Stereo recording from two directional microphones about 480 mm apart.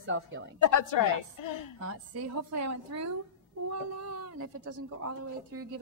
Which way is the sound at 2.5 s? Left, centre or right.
Right.